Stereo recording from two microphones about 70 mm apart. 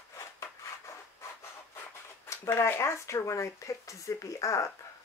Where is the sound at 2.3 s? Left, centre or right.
Left.